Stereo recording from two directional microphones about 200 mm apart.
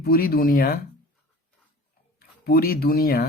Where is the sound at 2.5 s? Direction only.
50° left (ahead or behind).